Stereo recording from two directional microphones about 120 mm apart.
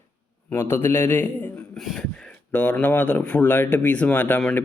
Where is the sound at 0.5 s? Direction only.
20° left (ahead or behind).